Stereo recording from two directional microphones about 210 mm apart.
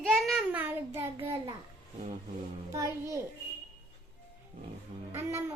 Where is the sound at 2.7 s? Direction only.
15° right (ahead or behind).